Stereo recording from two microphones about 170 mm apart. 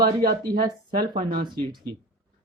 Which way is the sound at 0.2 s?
60° right (ahead or behind).